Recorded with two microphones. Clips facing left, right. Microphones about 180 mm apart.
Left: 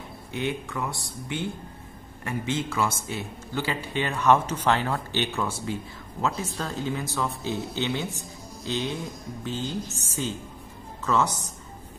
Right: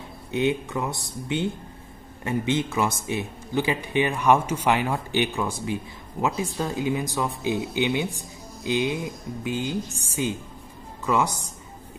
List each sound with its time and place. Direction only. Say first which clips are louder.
0.3 s a man's voice: right 6 dB; 20° right (ahead or behind)